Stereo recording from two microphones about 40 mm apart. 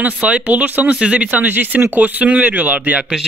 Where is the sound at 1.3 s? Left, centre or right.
Right.